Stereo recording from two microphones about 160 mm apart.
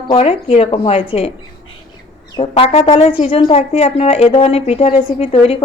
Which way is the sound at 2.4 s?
35° left (ahead or behind).